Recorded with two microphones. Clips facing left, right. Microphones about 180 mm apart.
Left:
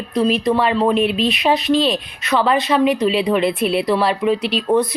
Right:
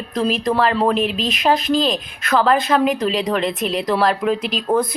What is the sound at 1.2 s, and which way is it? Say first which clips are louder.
Speech: left 4 dB; 45° right (ahead or behind).